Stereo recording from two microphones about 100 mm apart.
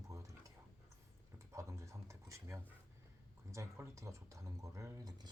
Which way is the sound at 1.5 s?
30° right (ahead or behind).